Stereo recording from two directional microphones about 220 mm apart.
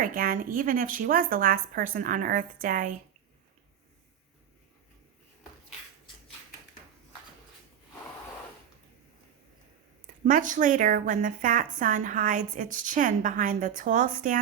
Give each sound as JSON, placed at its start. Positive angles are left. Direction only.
{"t": 0.0, "sound": "a woman's voice", "side_deg": -40}
{"t": 10.2, "sound": "a woman's voice", "side_deg": -35}